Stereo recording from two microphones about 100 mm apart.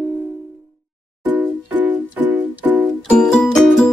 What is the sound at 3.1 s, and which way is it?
Music, 5° left (ahead or behind).